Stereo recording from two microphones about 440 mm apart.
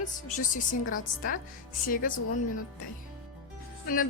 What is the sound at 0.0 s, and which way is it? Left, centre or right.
A woman's voice, centre.